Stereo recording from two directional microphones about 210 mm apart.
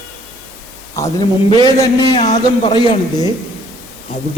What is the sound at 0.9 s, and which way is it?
A man's voice, 15° left (ahead or behind).